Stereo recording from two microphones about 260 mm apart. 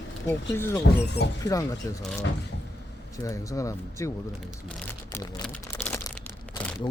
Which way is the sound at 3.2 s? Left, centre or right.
Centre.